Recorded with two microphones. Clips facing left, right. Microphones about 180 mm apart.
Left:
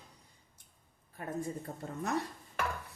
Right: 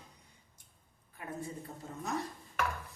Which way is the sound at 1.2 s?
40° left (ahead or behind).